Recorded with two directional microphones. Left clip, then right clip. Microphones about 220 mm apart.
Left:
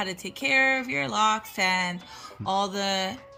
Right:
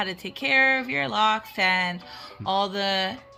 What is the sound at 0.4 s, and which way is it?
Speech, centre (ahead or behind).